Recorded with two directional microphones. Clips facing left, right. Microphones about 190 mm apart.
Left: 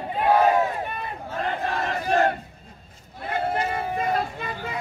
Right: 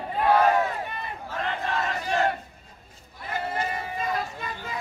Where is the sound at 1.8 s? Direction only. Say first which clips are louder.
Left 5 dB; 50° left (ahead or behind).